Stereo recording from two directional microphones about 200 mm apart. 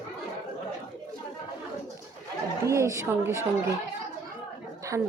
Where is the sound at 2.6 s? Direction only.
15° right (ahead or behind).